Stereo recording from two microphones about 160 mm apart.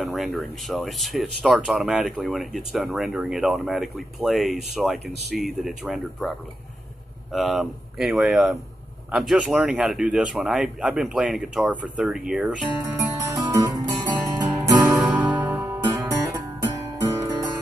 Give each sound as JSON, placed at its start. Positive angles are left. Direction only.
{"t": 0.0, "sound": "speech", "side_deg": 0}
{"t": 7.3, "sound": "speech", "side_deg": 0}
{"t": 12.9, "sound": "music", "side_deg": -20}
{"t": 15.0, "sound": "music", "side_deg": -5}